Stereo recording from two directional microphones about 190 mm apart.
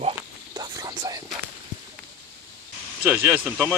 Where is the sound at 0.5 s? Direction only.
20° right (ahead or behind).